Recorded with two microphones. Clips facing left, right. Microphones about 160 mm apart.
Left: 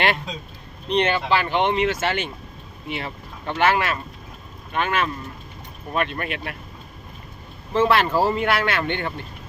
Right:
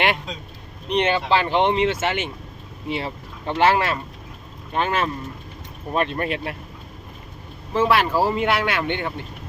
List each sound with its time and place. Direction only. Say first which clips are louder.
0.9 s speech: right 1 dB; 20° right (ahead or behind)
7.7 s speech: even; 10° right (ahead or behind)